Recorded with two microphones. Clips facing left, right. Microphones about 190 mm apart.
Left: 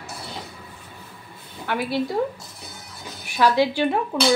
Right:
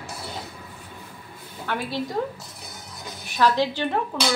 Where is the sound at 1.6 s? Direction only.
10° left (ahead or behind).